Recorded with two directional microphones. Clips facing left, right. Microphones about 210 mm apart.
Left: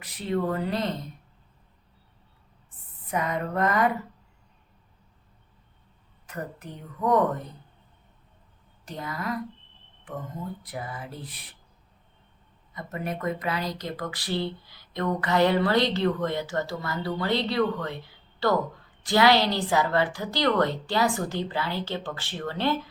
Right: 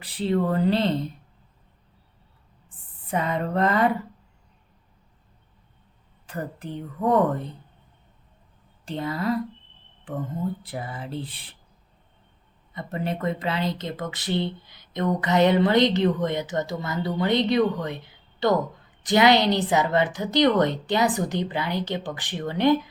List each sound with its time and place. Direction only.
0.0 s speech: 30° right (ahead or behind)
2.6 s speech: 30° right (ahead or behind)
6.2 s a woman's voice: 30° right (ahead or behind)
8.8 s a woman's voice: 30° right (ahead or behind)
10.6 s speech: 30° right (ahead or behind)
12.7 s speech: 30° right (ahead or behind)